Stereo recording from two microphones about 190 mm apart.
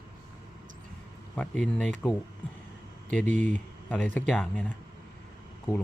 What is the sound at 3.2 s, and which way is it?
Speech, 40° right (ahead or behind).